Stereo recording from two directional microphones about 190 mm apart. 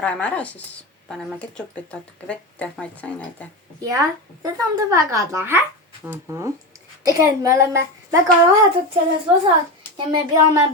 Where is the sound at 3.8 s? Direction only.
15° right (ahead or behind).